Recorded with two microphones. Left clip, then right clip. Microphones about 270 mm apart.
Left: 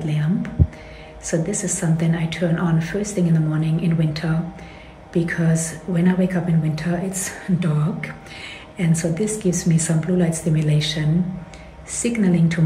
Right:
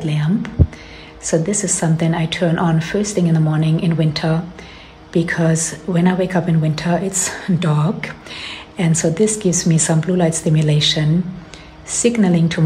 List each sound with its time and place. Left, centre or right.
0.1 s a woman's voice: centre